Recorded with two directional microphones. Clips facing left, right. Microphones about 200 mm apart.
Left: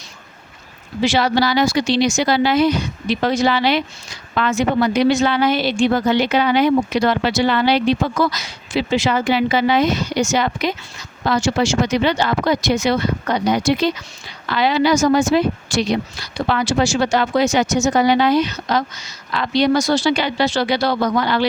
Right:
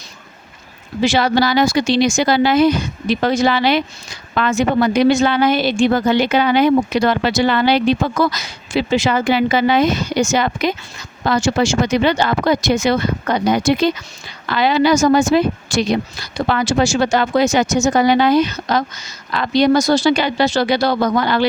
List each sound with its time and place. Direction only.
1.0 s a woman's voice: 45° right (ahead or behind)